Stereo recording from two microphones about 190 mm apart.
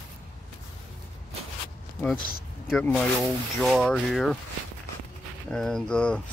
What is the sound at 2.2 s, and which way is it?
Speech, 50° left (ahead or behind).